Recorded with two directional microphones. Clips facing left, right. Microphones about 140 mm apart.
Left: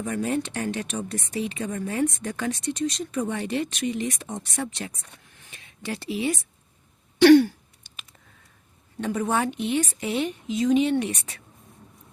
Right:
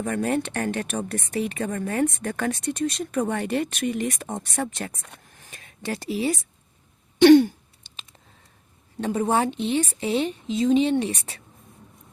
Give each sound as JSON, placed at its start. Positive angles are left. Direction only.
{"t": 0.0, "sound": "speech", "side_deg": -60}
{"t": 7.2, "sound": "throat clearing", "side_deg": -20}
{"t": 9.0, "sound": "a woman's voice", "side_deg": -25}